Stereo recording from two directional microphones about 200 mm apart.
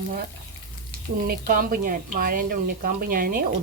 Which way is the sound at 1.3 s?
45° right (ahead or behind).